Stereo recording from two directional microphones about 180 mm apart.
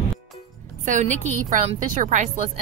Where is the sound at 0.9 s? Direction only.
40° right (ahead or behind).